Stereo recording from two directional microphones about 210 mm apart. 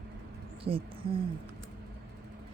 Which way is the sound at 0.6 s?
25° right (ahead or behind).